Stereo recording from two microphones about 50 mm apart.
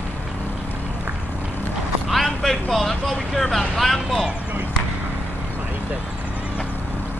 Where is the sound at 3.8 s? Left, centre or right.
Centre.